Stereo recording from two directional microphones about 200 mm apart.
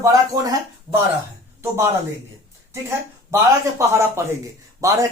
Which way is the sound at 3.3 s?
15° right (ahead or behind).